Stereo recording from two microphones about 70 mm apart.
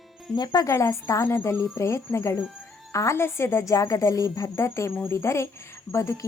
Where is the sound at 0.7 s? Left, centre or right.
Left.